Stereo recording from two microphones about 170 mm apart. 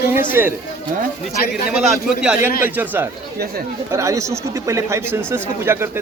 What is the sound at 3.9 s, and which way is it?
A man's voice, 15° right (ahead or behind).